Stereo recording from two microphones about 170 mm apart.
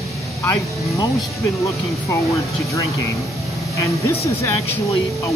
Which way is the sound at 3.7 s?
20° left (ahead or behind).